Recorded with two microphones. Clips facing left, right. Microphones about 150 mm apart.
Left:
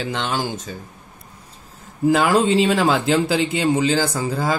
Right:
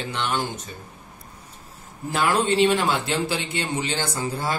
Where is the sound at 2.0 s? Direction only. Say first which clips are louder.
Left 6 dB; 90° left.